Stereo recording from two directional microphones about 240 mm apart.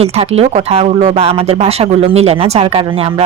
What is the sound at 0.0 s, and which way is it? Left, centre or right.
Speech, right.